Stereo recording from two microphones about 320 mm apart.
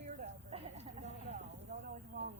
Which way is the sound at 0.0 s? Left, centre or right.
Right.